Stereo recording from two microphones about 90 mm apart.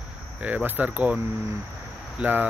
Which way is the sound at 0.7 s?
15° right (ahead or behind).